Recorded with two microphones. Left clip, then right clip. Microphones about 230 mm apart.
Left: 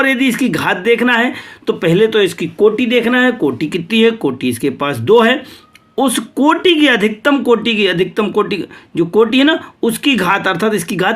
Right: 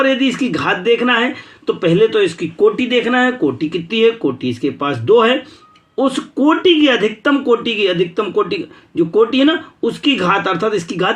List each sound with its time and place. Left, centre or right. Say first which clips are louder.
0.3 s speech: left 2 dB; left